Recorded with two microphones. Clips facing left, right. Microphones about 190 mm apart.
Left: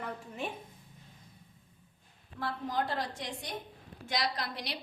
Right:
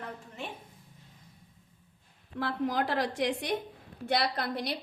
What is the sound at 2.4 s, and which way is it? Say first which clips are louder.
A woman's voice: right 4 dB; 75° right (ahead or behind).